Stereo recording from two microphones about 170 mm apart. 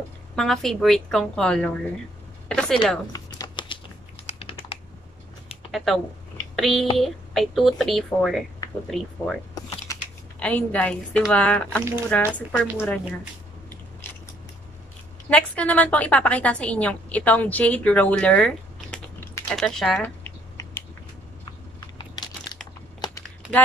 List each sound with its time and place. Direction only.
0.4 s a woman's voice: centre (ahead or behind)
3.1 s a sound: 25° left (ahead or behind)
4.4 s typing: 35° left (ahead or behind)
5.7 s a woman's voice: centre (ahead or behind)
9.6 s mechanisms: 20° left (ahead or behind)
10.4 s a woman's voice: 10° left (ahead or behind)
15.2 s a woman's voice: 10° left (ahead or behind)
21.5 s a sound: 20° left (ahead or behind)
22.9 s typing: 25° left (ahead or behind)